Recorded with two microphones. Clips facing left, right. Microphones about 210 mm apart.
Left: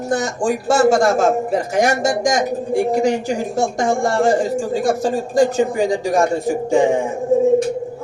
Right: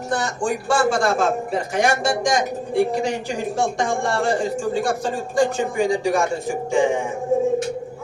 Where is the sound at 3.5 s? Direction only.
40° left (ahead or behind).